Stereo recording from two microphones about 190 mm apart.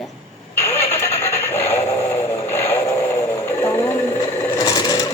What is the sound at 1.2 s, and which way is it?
Music, 15° left (ahead or behind).